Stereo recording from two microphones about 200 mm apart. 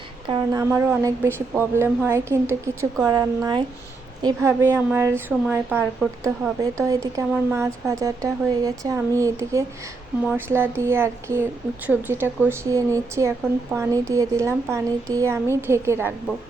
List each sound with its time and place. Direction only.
0.3 s a woman's voice: 25° right (ahead or behind)
0.6 s a woman's voice: 10° right (ahead or behind)